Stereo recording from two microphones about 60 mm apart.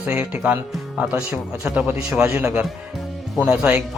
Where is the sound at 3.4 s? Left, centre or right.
Right.